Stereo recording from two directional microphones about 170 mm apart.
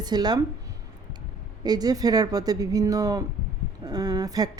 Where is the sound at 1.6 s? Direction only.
25° right (ahead or behind).